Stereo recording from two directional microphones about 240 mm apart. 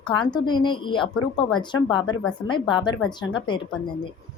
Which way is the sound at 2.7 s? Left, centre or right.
Centre.